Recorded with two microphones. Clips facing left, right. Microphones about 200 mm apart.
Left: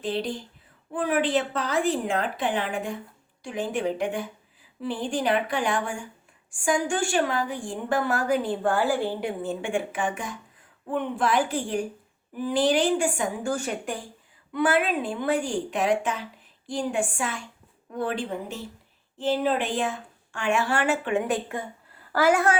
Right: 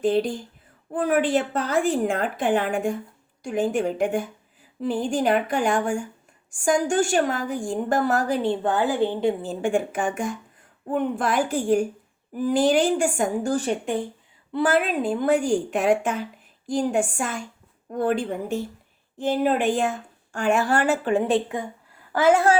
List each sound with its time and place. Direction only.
0.0 s a woman's voice: 50° right (ahead or behind); by 9.3 s 20° right (ahead or behind)
9.4 s a woman's voice: 40° right (ahead or behind)
14.5 s a woman's voice: 40° right (ahead or behind)